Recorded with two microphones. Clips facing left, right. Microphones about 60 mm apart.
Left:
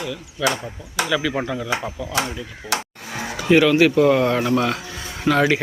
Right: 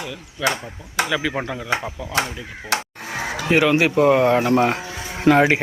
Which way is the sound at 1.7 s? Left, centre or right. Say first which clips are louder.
Right 3 dB; right.